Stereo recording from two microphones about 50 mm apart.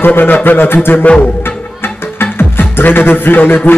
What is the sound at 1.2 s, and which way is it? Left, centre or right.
Music, left.